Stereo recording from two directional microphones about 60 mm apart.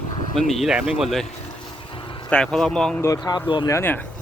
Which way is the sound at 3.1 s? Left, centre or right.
Left.